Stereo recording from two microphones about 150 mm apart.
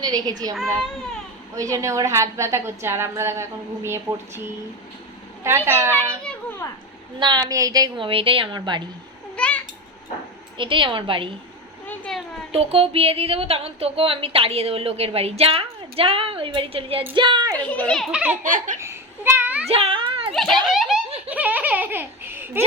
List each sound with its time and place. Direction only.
0.0 s a woman's voice: 25° right (ahead or behind)
1.5 s a woman's voice: 20° right (ahead or behind)
5.4 s speech: 15° right (ahead or behind)
7.2 s speech: 30° right (ahead or behind)
9.3 s babbling: 10° left (ahead or behind)
10.6 s speech: 35° right (ahead or behind)
11.9 s a sound: 5° left (ahead or behind)
12.5 s speech: 40° right (ahead or behind)
17.7 s a child's voice: 5° left (ahead or behind)
18.4 s laughter: 60° right (ahead or behind)
18.8 s a sound: 15° right (ahead or behind)
19.6 s a sound: 40° right (ahead or behind)
20.3 s a child's voice: centre (ahead or behind)
21.2 s giggle: 10° right (ahead or behind)